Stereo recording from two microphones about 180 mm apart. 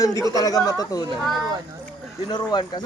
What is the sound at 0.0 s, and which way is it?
Speech, 20° left (ahead or behind).